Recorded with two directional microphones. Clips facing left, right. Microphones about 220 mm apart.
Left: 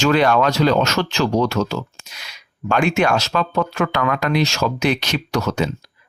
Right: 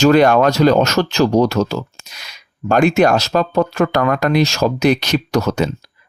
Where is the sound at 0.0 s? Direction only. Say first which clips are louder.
Right 5 dB; 45° right (ahead or behind).